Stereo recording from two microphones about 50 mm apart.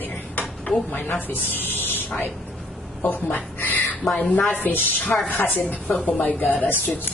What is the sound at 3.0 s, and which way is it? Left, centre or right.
A woman's voice, left.